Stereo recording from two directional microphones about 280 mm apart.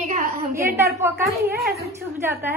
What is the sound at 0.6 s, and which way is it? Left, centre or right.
Speech, centre.